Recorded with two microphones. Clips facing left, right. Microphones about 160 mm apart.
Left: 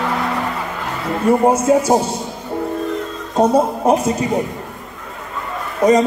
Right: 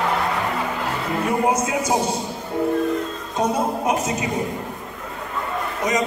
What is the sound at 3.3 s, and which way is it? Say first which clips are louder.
Speech: left 7 dB; 30° left (ahead or behind).